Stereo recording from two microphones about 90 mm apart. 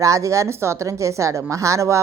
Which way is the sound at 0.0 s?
35° right (ahead or behind).